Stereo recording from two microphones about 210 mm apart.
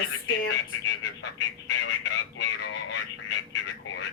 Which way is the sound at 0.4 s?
60° left (ahead or behind).